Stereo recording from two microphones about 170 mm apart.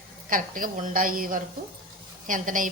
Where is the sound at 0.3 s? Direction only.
55° right (ahead or behind).